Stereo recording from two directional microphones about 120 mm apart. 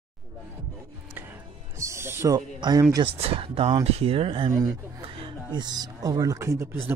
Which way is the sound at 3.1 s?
55° right (ahead or behind).